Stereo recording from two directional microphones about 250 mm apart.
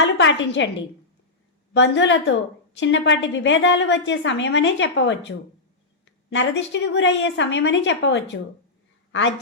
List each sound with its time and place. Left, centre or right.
0.0 s a woman's voice: left
1.7 s a woman's voice: left
6.3 s a woman's voice: left